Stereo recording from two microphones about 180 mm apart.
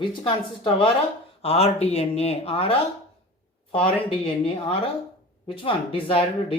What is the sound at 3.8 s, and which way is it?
Speech, 30° left (ahead or behind).